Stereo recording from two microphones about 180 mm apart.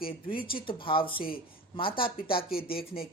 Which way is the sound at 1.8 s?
30° left (ahead or behind).